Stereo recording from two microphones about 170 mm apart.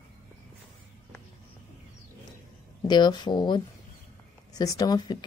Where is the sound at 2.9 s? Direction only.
25° left (ahead or behind).